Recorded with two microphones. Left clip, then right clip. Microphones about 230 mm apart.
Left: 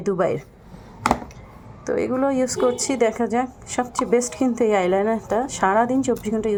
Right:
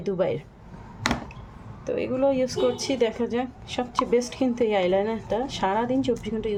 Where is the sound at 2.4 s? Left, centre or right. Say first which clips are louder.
Left 4 dB; centre.